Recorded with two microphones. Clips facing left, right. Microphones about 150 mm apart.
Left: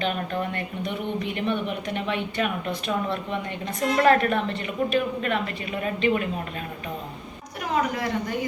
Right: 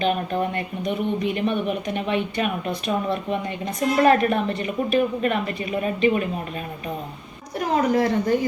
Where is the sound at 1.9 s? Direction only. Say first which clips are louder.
Right 3 dB; 15° right (ahead or behind).